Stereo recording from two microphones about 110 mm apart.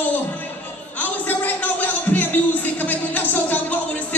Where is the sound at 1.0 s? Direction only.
15° left (ahead or behind).